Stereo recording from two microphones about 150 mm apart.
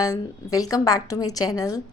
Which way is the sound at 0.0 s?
25° left (ahead or behind).